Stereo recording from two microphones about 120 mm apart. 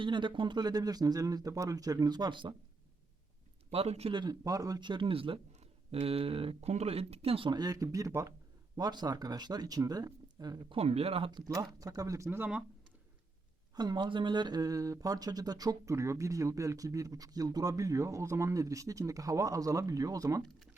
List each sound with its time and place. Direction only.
0.0 s speech: 40° right (ahead or behind)
3.7 s speech: 60° right (ahead or behind)
4.1 s a man's voice: 35° right (ahead or behind); by 7.5 s 50° right (ahead or behind)
7.5 s speech: 35° right (ahead or behind)
10.7 s speech: 55° right (ahead or behind)
11.3 s speech: 30° right (ahead or behind)
13.7 s speech: 35° right (ahead or behind)